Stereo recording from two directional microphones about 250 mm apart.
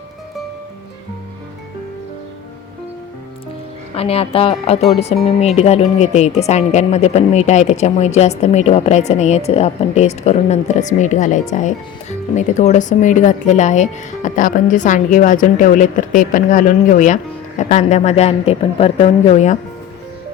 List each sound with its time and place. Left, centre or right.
3.9 s speech: left